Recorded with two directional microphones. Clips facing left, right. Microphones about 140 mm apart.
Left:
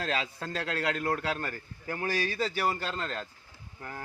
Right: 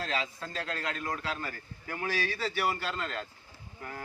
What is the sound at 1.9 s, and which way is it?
A man's voice, 35° left (ahead or behind).